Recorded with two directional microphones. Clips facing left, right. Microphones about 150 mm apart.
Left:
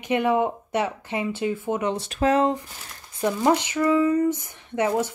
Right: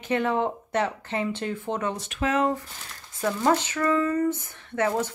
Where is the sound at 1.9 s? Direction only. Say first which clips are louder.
Left 7 dB; 35° left (ahead or behind).